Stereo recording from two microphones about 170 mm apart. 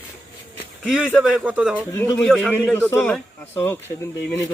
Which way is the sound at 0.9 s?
Centre (ahead or behind).